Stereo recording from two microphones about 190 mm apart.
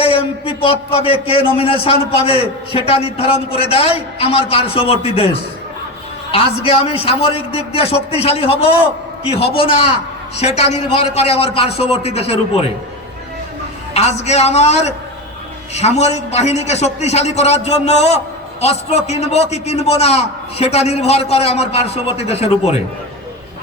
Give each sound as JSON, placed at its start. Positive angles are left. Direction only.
{"t": 0.0, "sound": "a man's voice", "side_deg": 30}
{"t": 13.9, "sound": "a man's voice", "side_deg": 35}